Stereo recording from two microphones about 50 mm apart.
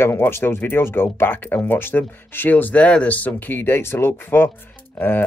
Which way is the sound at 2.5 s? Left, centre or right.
Left.